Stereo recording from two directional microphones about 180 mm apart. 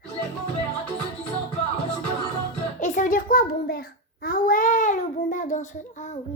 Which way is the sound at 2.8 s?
45° left (ahead or behind).